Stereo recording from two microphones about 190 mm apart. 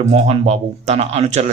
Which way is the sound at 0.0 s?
35° right (ahead or behind).